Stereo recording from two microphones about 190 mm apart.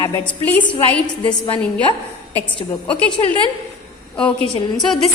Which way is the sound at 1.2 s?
25° left (ahead or behind).